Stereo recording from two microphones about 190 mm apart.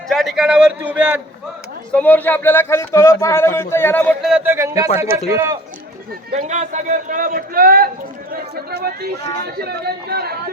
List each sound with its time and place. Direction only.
0.1 s a man's voice: centre (ahead or behind)
1.9 s speech: 10° left (ahead or behind)
4.2 s speech: 5° right (ahead or behind)
6.3 s a man's voice: 40° right (ahead or behind); by 10.4 s 55° right (ahead or behind)